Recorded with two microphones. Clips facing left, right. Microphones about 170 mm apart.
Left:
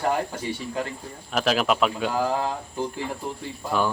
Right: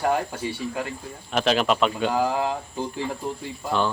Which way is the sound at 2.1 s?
15° right (ahead or behind).